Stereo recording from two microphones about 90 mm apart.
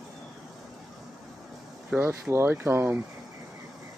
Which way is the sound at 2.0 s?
25° right (ahead or behind).